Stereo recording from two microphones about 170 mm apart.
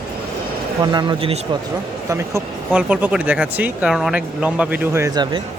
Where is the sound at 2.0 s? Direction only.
15° right (ahead or behind).